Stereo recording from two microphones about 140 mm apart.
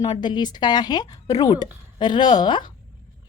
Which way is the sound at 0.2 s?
30° left (ahead or behind).